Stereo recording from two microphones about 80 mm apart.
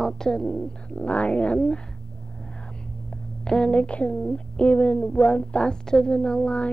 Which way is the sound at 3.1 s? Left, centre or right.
Centre.